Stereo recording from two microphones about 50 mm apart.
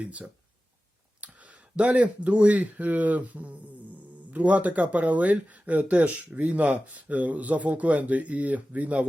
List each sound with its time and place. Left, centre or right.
0.0 s speech: right